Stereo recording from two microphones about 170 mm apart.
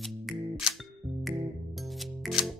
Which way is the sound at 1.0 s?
25° right (ahead or behind).